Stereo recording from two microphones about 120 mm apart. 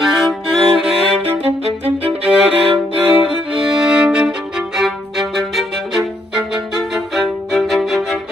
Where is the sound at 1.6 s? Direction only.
55° right (ahead or behind).